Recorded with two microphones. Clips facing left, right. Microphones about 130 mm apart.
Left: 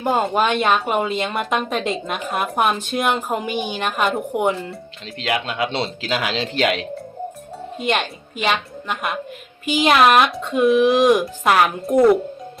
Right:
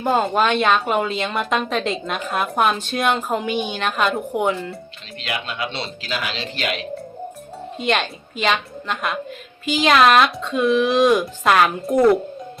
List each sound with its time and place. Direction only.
0.0 s a woman's voice: centre (ahead or behind)
5.2 s speech: 80° left
7.9 s a woman's voice: 5° left (ahead or behind)